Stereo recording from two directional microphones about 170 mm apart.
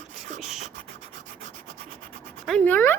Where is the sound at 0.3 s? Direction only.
45° right (ahead or behind).